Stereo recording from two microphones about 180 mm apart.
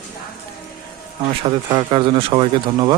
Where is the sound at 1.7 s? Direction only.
25° right (ahead or behind).